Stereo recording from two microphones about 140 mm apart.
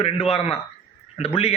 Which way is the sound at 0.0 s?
45° left (ahead or behind).